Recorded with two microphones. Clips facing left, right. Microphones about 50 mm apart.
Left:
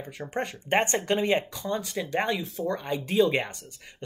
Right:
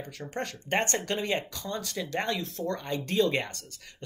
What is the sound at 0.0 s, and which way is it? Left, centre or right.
Speech, centre.